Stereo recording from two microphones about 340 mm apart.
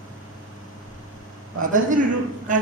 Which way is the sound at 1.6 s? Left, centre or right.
Right.